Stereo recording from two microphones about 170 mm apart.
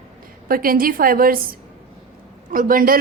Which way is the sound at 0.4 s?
60° right (ahead or behind).